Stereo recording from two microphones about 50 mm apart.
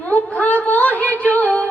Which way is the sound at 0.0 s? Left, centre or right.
Left.